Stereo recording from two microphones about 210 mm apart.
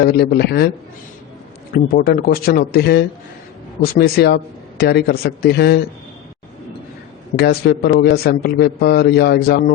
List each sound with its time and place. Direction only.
0.0 s a man's voice: 50° left (ahead or behind)
1.7 s a man's voice: 45° left (ahead or behind)
7.3 s a man's voice: 50° left (ahead or behind)